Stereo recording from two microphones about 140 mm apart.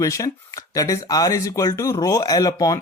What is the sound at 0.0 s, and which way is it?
Speech, 20° left (ahead or behind).